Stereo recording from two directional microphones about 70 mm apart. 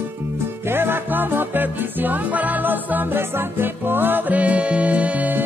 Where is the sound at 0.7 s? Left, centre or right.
Right.